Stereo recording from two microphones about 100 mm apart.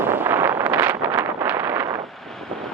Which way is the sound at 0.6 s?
20° right (ahead or behind).